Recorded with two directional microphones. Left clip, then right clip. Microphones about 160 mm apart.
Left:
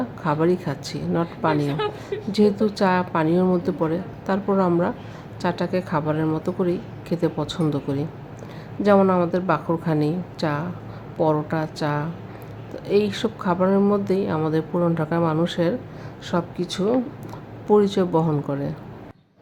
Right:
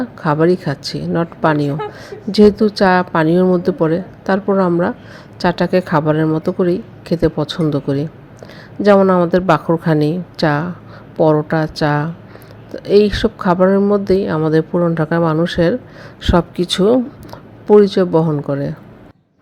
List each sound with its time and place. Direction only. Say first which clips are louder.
0.0 s speech: right 7 dB; 35° right (ahead or behind)
1.5 s speech: right 4 dB; 5° right (ahead or behind)
2.3 s speech: right 9 dB; 35° right (ahead or behind)
16.2 s speech: right 10 dB; 50° right (ahead or behind)
17.7 s speech: right 8 dB; 30° right (ahead or behind)